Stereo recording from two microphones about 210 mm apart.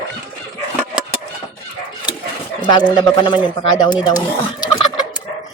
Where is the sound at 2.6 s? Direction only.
20° left (ahead or behind).